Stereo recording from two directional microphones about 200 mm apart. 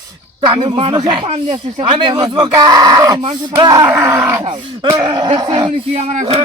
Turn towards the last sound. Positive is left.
turn(degrees=-30)  # may be behind; listen again after turning